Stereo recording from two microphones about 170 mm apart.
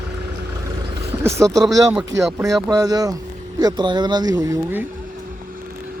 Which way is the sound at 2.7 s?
20° right (ahead or behind).